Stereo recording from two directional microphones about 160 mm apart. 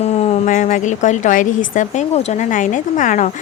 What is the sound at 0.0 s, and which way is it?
A woman's voice, 40° left (ahead or behind).